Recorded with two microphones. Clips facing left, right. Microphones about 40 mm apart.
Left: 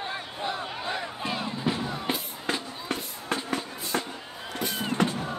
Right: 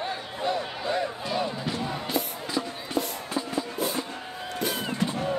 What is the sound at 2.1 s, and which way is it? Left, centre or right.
Music, left.